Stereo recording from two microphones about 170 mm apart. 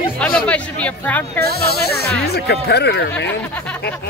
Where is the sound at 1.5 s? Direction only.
70° left (ahead or behind).